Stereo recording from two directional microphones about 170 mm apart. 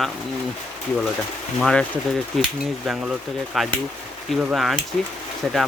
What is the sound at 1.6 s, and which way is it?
Speech, 5° left (ahead or behind).